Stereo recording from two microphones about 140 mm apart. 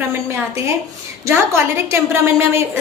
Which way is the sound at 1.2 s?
20° right (ahead or behind).